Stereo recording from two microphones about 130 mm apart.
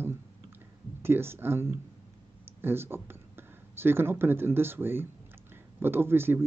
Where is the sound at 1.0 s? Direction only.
20° right (ahead or behind).